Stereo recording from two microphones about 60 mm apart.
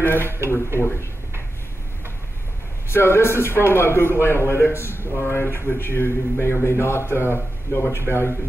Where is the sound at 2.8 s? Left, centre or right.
Left.